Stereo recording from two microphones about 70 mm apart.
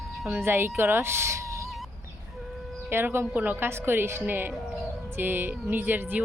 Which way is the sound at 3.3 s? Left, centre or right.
Right.